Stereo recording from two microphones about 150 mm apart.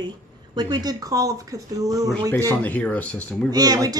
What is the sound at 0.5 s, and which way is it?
Speech, 30° right (ahead or behind).